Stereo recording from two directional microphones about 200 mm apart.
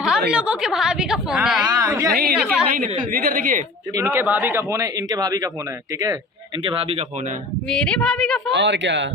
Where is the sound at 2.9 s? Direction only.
40° right (ahead or behind).